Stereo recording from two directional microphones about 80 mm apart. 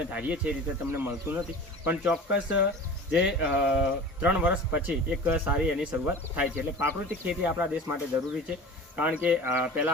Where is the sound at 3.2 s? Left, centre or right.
Centre.